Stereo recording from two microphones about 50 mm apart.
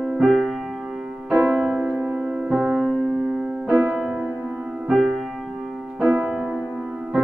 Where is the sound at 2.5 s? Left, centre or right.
Centre.